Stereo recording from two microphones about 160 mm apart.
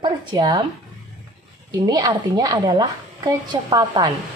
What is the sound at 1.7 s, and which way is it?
A woman's voice, 25° right (ahead or behind).